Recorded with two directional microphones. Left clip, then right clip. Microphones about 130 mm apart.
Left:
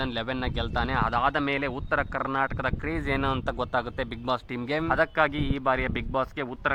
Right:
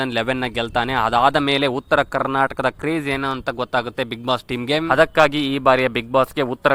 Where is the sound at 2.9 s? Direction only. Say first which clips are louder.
Right 5 dB; 35° right (ahead or behind).